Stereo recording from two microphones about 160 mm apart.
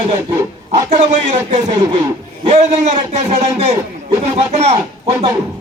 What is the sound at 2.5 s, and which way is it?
A man's voice, 45° right (ahead or behind).